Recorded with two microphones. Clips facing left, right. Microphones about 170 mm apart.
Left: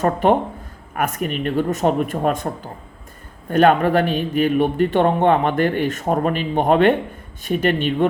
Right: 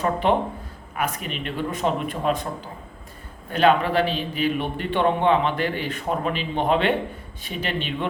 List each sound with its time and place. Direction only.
0.0 s speech: 45° left (ahead or behind)
3.5 s speech: 50° left (ahead or behind)